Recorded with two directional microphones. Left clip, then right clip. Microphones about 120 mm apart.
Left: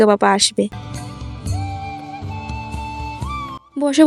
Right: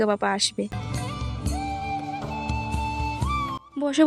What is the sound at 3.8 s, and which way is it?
Speech, 35° left (ahead or behind).